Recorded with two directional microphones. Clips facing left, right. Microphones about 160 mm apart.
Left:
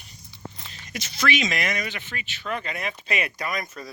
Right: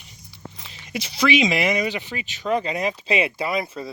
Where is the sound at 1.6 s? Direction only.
25° right (ahead or behind).